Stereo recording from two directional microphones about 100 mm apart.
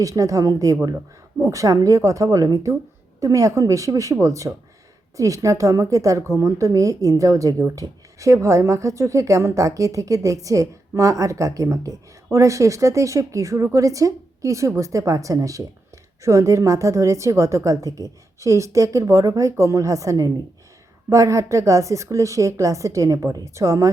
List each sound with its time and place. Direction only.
0.0 s speech: 35° right (ahead or behind)